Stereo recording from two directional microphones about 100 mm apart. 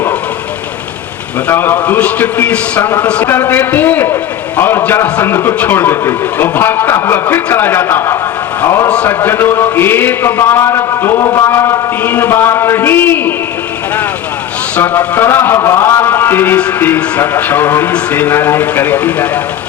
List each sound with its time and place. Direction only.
1.5 s a man's voice: 20° left (ahead or behind)
14.8 s a man's voice: 20° left (ahead or behind)